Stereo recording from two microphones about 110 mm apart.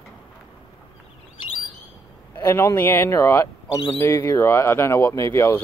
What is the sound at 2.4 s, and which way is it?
Speech, 25° left (ahead or behind).